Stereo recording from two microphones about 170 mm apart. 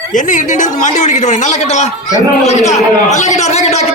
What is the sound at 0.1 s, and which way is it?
A man's voice, 50° left (ahead or behind).